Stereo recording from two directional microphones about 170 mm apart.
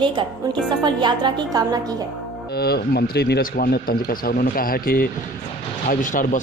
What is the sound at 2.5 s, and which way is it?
Speech, 70° left (ahead or behind).